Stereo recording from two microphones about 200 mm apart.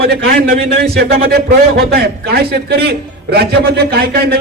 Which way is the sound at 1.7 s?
50° right (ahead or behind).